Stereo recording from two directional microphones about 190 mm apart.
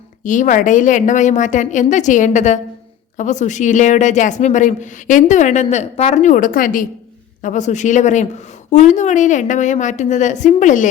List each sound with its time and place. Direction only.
0.2 s a woman's voice: 40° left (ahead or behind)